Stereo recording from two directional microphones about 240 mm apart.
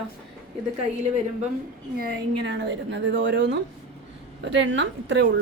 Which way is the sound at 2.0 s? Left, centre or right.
Right.